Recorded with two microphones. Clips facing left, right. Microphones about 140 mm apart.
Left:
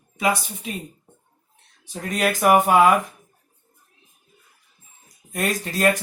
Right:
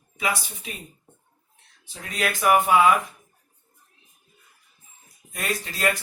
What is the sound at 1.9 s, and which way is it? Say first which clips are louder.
Speech: left 5 dB; 45° left (ahead or behind).